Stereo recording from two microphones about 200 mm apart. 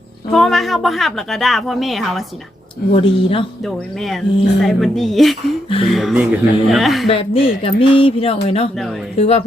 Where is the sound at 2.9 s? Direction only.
25° left (ahead or behind).